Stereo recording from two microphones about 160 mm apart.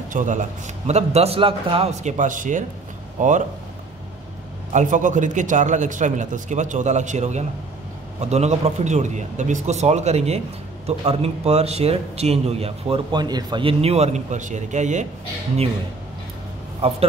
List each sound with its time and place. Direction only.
0.1 s a man's voice: 50° right (ahead or behind)
4.7 s a man's voice: 50° right (ahead or behind)
16.8 s speech: 40° right (ahead or behind)